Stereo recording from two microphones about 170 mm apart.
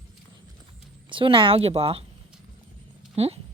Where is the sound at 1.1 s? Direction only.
30° right (ahead or behind).